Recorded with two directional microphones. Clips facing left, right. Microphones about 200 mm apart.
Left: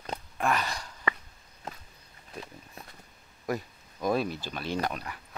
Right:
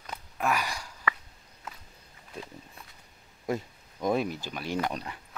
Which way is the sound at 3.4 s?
20° right (ahead or behind).